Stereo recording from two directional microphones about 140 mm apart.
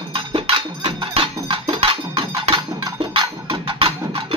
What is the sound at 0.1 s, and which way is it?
Music, 35° right (ahead or behind).